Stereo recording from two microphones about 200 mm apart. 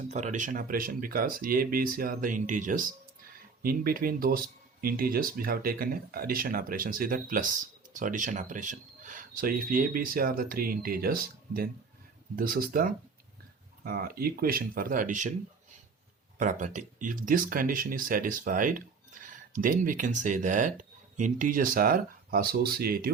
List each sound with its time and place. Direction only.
0.0 s speech: 35° right (ahead or behind)
16.4 s speech: 40° right (ahead or behind)